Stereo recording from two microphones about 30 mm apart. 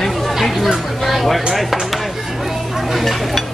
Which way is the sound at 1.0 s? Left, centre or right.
Centre.